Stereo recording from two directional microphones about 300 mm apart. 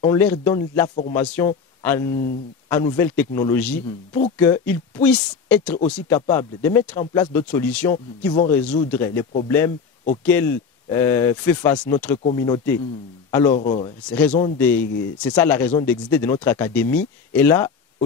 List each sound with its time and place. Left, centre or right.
0.0 s speech: centre
13.6 s speech: left
14.0 s speech: centre
17.3 s a sound: centre